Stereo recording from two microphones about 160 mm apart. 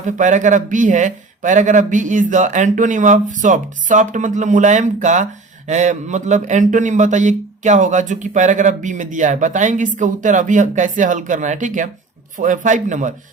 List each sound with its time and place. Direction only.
0.0 s speech: 50° right (ahead or behind)